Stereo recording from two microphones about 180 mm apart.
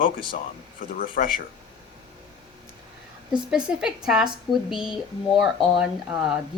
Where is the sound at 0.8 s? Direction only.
50° left (ahead or behind).